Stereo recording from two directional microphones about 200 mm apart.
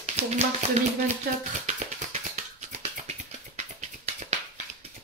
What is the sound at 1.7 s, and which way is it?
Music, 35° right (ahead or behind).